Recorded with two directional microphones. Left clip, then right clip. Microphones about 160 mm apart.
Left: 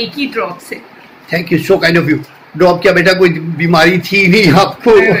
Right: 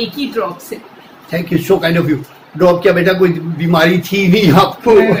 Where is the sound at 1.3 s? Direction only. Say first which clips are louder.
Left 2 dB; 40° left (ahead or behind).